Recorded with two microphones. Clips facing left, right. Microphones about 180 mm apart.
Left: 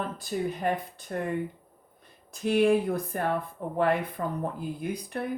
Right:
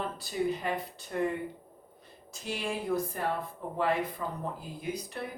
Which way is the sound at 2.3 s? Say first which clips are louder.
Left 13 dB; 55° left (ahead or behind).